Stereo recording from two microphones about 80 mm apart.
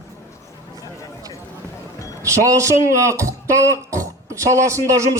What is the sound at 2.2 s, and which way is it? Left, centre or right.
Speech, right.